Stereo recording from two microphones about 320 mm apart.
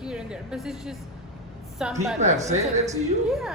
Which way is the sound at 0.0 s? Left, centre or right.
Centre.